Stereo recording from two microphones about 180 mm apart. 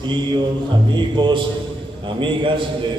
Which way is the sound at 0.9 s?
25° right (ahead or behind).